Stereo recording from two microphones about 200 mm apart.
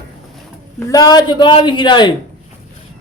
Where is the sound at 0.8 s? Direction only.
20° left (ahead or behind).